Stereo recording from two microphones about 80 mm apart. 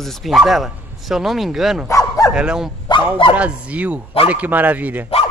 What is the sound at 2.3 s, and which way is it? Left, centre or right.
A man's voice, centre.